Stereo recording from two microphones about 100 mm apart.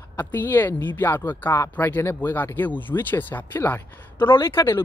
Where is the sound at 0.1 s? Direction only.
20° left (ahead or behind).